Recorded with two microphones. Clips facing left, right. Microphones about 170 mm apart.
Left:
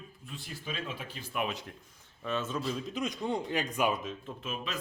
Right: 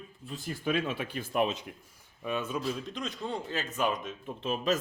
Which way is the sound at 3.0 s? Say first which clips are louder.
Left 3 dB; 15° left (ahead or behind).